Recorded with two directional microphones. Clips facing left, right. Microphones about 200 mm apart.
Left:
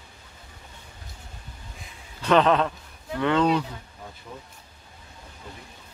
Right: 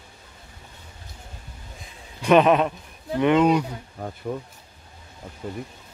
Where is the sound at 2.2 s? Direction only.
15° right (ahead or behind).